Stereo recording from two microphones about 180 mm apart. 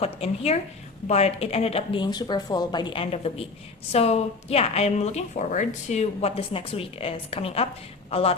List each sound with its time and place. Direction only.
0.0 s a woman's voice: 35° left (ahead or behind)